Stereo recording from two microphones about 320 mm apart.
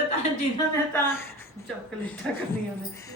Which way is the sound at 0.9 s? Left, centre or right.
Centre.